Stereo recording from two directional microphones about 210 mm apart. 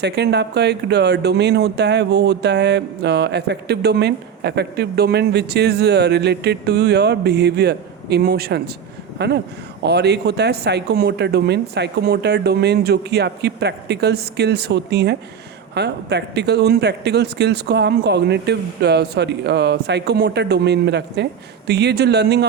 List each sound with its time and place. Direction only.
0.0 s speech: 55° right (ahead or behind)